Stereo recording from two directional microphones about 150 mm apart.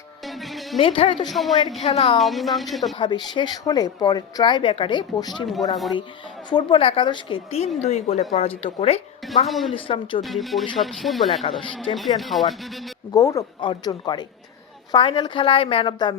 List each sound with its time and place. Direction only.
0.3 s music: centre (ahead or behind)
0.8 s a woman's voice: 40° left (ahead or behind)
1.3 s speech: centre (ahead or behind)
1.8 s a woman's voice: 40° left (ahead or behind)
2.1 s speech: centre (ahead or behind)
3.0 s a woman's voice: 30° left (ahead or behind)
6.5 s a woman's voice: 35° left (ahead or behind)
9.5 s speech: centre (ahead or behind)
9.7 s a woman's voice: 35° left (ahead or behind)
10.2 s speech: centre (ahead or behind)
13.1 s a woman's voice: 20° left (ahead or behind)